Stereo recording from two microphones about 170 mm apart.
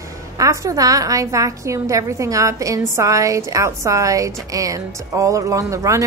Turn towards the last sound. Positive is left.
turn(degrees=-15)  # may be behind; listen again after turning